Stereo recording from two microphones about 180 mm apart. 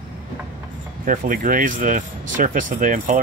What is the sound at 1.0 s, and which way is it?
Speech, 45° right (ahead or behind).